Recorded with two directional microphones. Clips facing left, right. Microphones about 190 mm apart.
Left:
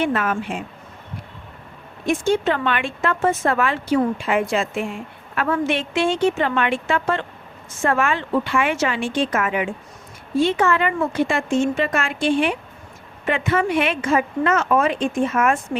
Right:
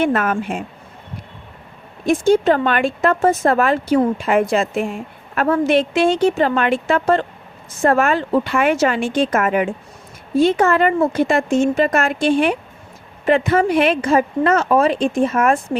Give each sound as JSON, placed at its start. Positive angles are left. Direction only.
{"t": 0.0, "sound": "speech", "side_deg": -45}
{"t": 2.0, "sound": "speech", "side_deg": -40}